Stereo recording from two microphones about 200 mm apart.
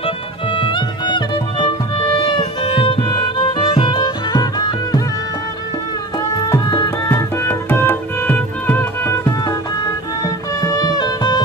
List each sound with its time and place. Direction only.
0.6 s music: 25° left (ahead or behind)
6.5 s music: 20° left (ahead or behind)